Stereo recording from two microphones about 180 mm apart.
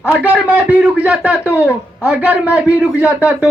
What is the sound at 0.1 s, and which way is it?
A man's voice, 10° right (ahead or behind).